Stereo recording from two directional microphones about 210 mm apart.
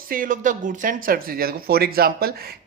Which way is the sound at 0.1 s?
40° right (ahead or behind).